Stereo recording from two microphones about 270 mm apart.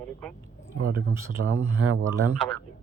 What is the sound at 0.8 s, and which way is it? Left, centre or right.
Speech, right.